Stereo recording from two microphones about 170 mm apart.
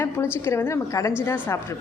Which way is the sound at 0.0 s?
15° left (ahead or behind).